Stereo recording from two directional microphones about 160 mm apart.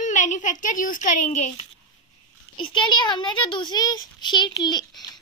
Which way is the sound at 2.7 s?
30° left (ahead or behind).